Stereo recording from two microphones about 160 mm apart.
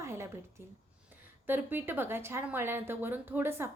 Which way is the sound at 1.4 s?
10° right (ahead or behind).